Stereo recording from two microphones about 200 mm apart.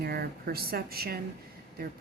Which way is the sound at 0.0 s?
50° right (ahead or behind).